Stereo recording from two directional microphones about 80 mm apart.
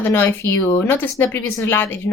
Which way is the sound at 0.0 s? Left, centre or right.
Left.